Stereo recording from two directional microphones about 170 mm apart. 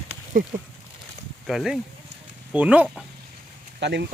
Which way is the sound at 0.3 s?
55° right (ahead or behind).